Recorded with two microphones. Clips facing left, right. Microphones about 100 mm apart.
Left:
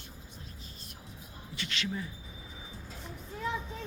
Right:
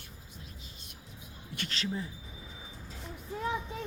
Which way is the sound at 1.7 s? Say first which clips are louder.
Even; 35° right (ahead or behind).